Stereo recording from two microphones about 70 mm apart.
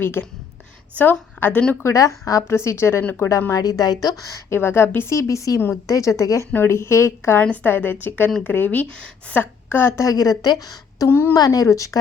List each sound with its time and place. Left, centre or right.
0.0 s a woman's voice: left
1.8 s a woman's voice: left
2.5 s a woman's voice: left
3.5 s a woman's voice: left
4.4 s a woman's voice: left
4.9 s a woman's voice: left
6.5 s a woman's voice: left
7.5 s a woman's voice: left
10.0 s a woman's voice: left
11.1 s a woman's voice: left
11.3 s a woman's voice: left